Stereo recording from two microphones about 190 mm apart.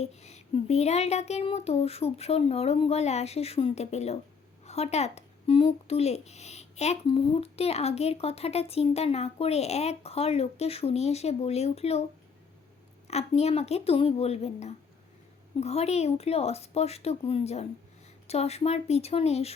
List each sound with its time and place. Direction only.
0.0 s speech: 35° left (ahead or behind)
13.1 s speech: 35° left (ahead or behind)